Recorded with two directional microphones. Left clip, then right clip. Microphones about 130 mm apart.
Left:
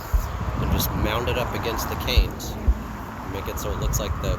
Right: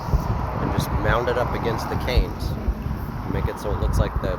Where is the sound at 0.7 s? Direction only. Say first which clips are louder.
Right 3 dB; 15° left (ahead or behind).